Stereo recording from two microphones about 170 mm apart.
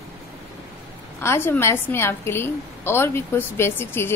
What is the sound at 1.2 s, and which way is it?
A woman's voice, 15° left (ahead or behind).